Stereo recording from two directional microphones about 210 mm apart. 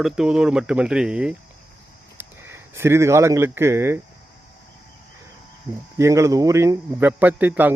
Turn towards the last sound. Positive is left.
turn(degrees=-10)  # may be behind; listen again after turning